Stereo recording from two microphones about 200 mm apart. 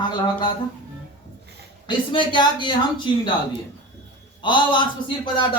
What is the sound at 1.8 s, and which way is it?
Speech, 25° left (ahead or behind).